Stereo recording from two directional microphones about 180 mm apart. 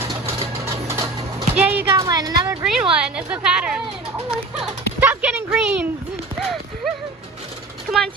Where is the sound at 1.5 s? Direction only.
10° right (ahead or behind).